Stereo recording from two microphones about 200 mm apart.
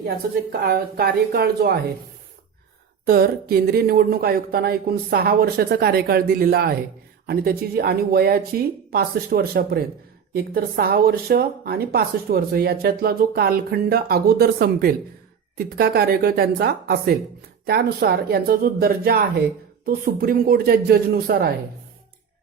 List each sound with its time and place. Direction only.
0.6 s speech: 50° right (ahead or behind)
3.1 s speech: 50° right (ahead or behind)